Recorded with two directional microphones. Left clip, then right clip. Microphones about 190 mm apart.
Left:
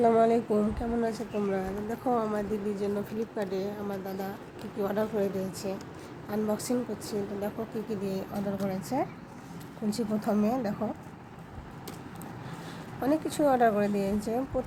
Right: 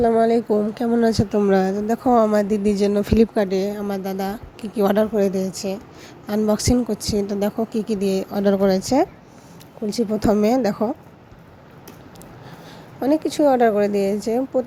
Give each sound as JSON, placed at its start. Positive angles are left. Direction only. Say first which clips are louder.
{"t": 0.0, "sound": "speech", "louder": "right 6 dB", "side_deg": -20}
{"t": 0.8, "sound": "a woman's voice", "louder": "right 12 dB", "side_deg": -40}
{"t": 13.0, "sound": "a woman's voice", "louder": "right 9 dB", "side_deg": -30}